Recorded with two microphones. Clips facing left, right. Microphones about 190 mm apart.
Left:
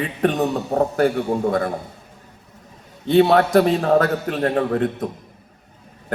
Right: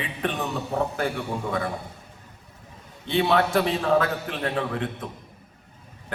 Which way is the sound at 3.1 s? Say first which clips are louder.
Left 7 dB; 45° left (ahead or behind).